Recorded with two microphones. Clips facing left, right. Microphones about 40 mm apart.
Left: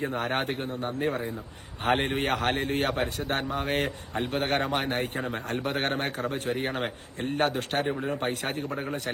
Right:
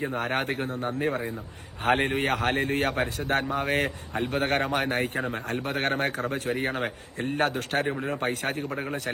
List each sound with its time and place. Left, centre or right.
0.2 s a man's voice: right
1.8 s a man's voice: right
8.7 s speech: right